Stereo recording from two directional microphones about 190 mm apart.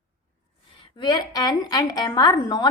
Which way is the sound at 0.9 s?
20° left (ahead or behind).